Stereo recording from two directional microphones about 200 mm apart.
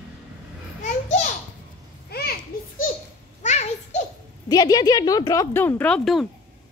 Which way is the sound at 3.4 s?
35° left (ahead or behind).